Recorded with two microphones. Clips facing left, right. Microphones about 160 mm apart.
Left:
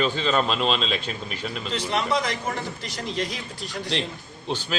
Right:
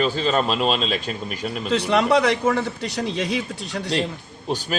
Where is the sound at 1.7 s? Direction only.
70° right (ahead or behind).